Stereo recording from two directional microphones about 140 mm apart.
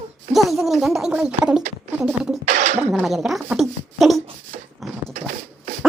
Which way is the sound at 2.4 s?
60° right (ahead or behind).